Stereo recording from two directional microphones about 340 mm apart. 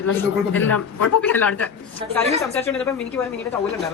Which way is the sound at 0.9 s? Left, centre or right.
Left.